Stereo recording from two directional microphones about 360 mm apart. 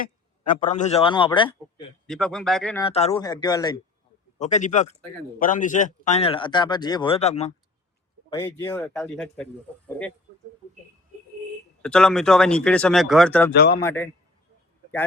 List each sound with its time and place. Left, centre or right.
0.0 s a man's voice: left
2.0 s speech: centre
2.8 s a man's voice: centre
8.4 s speech: centre
11.8 s speech: centre
13.5 s a man's voice: left